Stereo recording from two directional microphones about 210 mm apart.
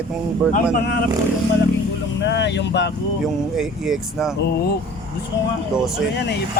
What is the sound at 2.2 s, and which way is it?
Speech, 55° left (ahead or behind).